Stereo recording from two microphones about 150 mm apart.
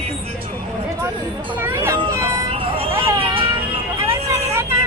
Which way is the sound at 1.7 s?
20° right (ahead or behind).